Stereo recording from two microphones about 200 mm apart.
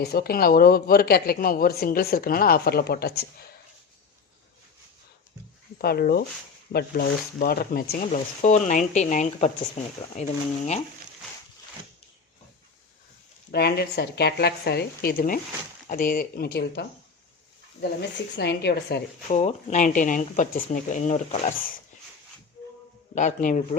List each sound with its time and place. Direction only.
0.0 s speech: 50° left (ahead or behind)
5.8 s speech: 50° left (ahead or behind)
8.0 s speech: 35° left (ahead or behind)
13.5 s speech: 55° left (ahead or behind)
18.3 s a woman's voice: 55° left (ahead or behind)
19.4 s speech: 35° left (ahead or behind)
23.1 s speech: 40° left (ahead or behind)